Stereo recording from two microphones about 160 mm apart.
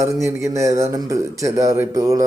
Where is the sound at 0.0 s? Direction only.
15° right (ahead or behind).